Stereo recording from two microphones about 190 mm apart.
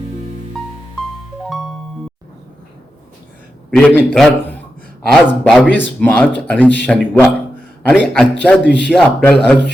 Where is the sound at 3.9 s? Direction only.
5° left (ahead or behind).